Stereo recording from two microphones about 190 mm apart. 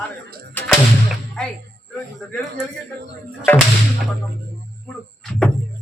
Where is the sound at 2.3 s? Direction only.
Centre (ahead or behind).